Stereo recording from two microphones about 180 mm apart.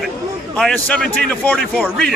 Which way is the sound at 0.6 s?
5° left (ahead or behind).